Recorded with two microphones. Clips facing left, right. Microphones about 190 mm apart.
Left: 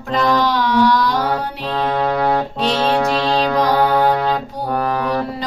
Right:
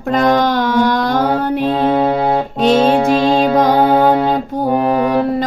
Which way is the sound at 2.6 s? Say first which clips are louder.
Right 8 dB; 50° right (ahead or behind).